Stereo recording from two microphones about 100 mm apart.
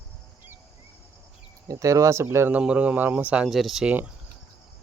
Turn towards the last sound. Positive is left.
turn(degrees=0)  # may be behind; listen again after turning